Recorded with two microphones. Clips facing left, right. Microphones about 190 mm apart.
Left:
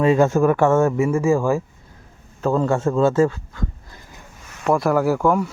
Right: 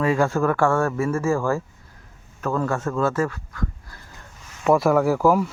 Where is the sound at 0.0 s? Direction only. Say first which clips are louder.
Left 5 dB; 20° left (ahead or behind).